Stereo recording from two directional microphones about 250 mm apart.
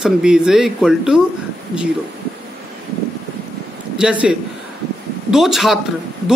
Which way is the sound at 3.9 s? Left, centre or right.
Centre.